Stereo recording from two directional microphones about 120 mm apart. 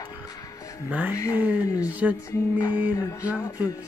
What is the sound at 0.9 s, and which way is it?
Music, 15° right (ahead or behind).